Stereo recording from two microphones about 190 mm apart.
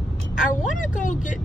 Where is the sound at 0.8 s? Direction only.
40° left (ahead or behind).